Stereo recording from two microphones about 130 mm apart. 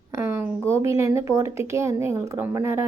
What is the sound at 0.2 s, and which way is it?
Speech, 20° right (ahead or behind).